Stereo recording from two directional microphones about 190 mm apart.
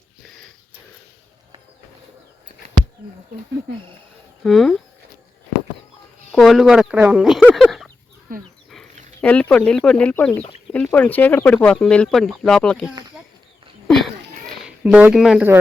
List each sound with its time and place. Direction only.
4.4 s speech: centre (ahead or behind)
6.3 s speech: centre (ahead or behind)
8.3 s speech: 50° right (ahead or behind)
9.2 s speech: 5° left (ahead or behind)
13.8 s a sound: centre (ahead or behind)